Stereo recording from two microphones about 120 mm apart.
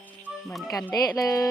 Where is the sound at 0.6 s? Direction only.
30° left (ahead or behind).